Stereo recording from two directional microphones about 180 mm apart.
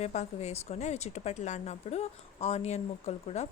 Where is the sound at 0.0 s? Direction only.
40° left (ahead or behind).